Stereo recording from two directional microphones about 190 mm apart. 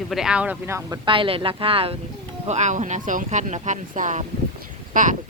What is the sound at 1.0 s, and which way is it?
Speech, 25° right (ahead or behind).